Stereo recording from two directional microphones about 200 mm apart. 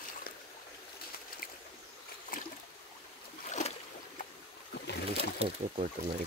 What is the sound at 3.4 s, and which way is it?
Boat, 35° left (ahead or behind).